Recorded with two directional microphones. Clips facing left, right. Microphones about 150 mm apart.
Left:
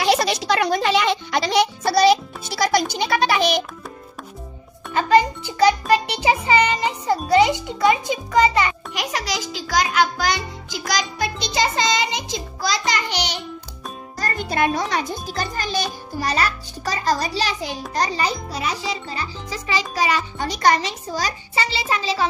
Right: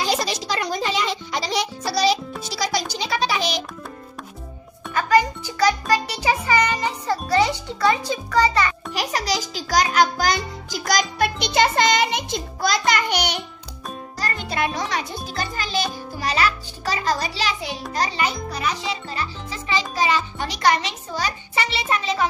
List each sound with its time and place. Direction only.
0.0 s music: 65° left (ahead or behind)
4.9 s music: 25° left (ahead or behind)
8.9 s music: 35° right (ahead or behind); by 13.4 s 55° right (ahead or behind)
14.2 s music: 45° left (ahead or behind)
20.7 s a sound: 40° left (ahead or behind)
21.9 s music: 30° left (ahead or behind)